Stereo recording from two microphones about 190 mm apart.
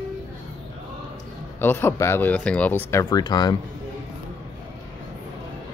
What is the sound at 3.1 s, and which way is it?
Speech, 20° left (ahead or behind).